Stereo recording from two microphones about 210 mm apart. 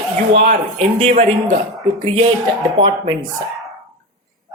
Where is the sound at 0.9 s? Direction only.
35° right (ahead or behind).